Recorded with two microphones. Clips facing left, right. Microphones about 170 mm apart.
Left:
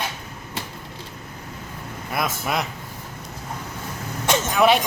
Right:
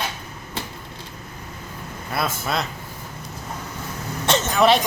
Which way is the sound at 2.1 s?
15° left (ahead or behind).